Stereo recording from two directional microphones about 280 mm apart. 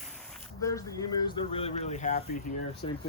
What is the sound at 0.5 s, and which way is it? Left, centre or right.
Speech, centre.